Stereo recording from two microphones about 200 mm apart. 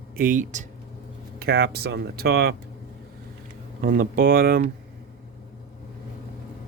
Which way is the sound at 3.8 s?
45° right (ahead or behind).